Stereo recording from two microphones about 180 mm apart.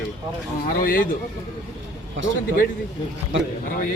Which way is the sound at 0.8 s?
50° left (ahead or behind).